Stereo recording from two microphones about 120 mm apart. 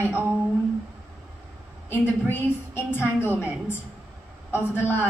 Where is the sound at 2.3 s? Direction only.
20° left (ahead or behind).